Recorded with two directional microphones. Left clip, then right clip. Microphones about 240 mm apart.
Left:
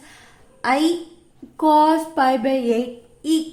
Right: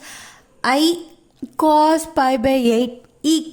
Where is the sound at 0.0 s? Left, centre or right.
Right.